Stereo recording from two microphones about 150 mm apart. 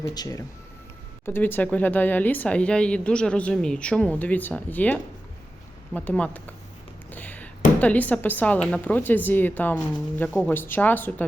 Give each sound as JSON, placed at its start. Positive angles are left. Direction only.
{"t": 0.0, "sound": "speech", "side_deg": 25}
{"t": 1.2, "sound": "speech", "side_deg": 15}
{"t": 7.1, "sound": "a sound", "side_deg": 10}
{"t": 7.8, "sound": "speech", "side_deg": 10}